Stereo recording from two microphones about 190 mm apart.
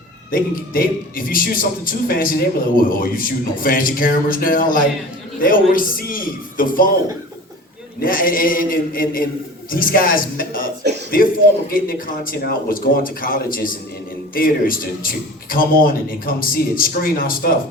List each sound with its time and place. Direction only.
0.3 s a man's voice: 50° left (ahead or behind)
8.0 s a man's voice: 50° left (ahead or behind)